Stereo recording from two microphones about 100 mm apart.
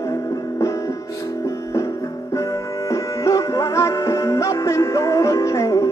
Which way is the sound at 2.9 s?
35° left (ahead or behind).